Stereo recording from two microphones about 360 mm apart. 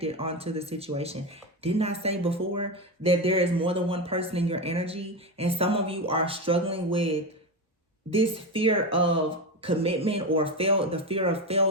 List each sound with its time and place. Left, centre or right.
0.0 s speech: centre